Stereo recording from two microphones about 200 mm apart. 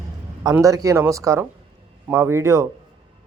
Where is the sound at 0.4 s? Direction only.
15° right (ahead or behind).